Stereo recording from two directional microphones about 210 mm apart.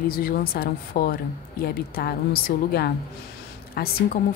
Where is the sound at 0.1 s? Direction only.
45° left (ahead or behind).